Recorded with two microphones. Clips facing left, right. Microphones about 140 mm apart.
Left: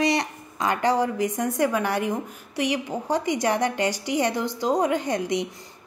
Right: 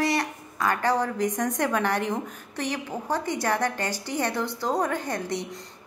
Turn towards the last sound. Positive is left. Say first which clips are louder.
# left 5 dB
turn(degrees=15)  # may be behind; listen again after turning